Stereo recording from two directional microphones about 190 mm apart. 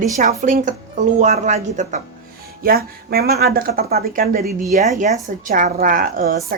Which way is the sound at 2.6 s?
50° right (ahead or behind).